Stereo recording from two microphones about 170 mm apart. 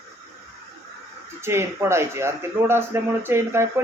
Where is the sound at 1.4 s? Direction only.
15° right (ahead or behind).